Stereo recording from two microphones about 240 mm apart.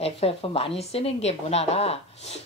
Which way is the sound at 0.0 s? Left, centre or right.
Left.